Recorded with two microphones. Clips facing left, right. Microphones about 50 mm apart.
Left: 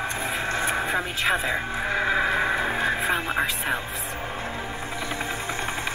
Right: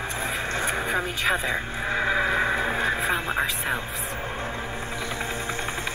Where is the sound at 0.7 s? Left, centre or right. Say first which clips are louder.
Left 1 dB; centre.